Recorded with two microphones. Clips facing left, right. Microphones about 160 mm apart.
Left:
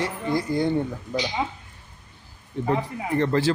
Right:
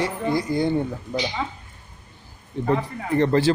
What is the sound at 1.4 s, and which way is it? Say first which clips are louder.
Speech: left 1 dB; 25° left (ahead or behind).